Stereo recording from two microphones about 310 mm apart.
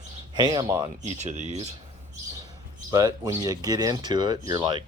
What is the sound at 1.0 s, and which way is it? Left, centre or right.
Speech, right.